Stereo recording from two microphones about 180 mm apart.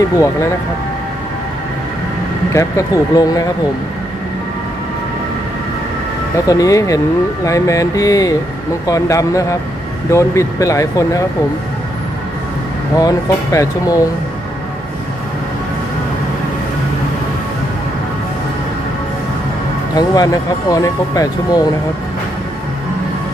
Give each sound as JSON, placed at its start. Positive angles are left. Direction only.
{"t": 2.5, "sound": "speech", "side_deg": 15}
{"t": 6.3, "sound": "speech", "side_deg": 20}
{"t": 13.0, "sound": "speech", "side_deg": 20}
{"t": 20.0, "sound": "speech", "side_deg": 20}